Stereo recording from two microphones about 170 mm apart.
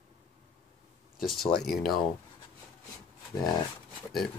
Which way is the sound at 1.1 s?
Centre (ahead or behind).